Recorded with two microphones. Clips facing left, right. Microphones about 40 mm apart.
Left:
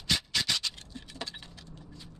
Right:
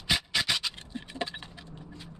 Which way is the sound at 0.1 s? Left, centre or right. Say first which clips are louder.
Right 2 dB; centre.